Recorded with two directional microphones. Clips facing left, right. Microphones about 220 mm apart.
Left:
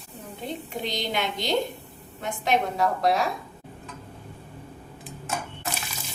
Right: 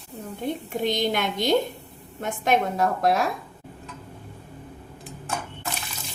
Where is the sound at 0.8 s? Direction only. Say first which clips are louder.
Right 5 dB; 50° right (ahead or behind).